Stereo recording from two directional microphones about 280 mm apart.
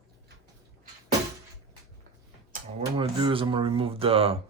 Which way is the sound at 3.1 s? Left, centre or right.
Centre.